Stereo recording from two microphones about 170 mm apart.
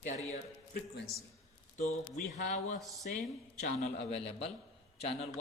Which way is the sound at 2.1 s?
45° left (ahead or behind).